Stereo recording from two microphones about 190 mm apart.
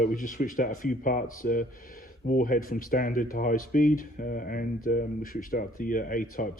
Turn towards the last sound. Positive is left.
turn(degrees=45)  # may be behind; listen again after turning